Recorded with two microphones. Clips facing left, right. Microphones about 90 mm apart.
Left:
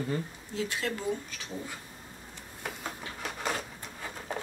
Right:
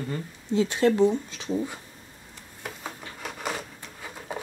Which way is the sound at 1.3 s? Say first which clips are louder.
Right 10 dB; 20° right (ahead or behind).